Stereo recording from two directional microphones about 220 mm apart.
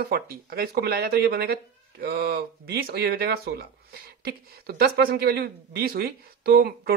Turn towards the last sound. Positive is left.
turn(degrees=-45)  # may be behind; listen again after turning